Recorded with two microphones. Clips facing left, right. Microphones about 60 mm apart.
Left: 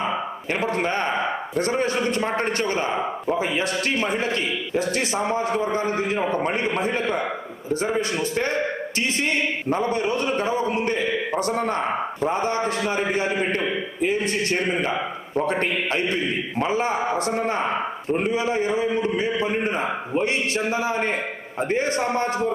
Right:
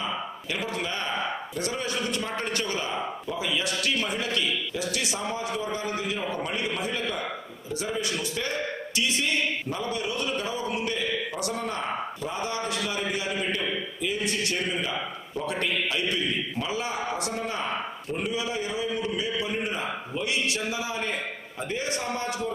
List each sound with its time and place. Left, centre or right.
0.0 s a man's voice: left